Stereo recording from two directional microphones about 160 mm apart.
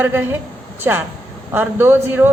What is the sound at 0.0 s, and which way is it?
A woman's voice, 15° right (ahead or behind).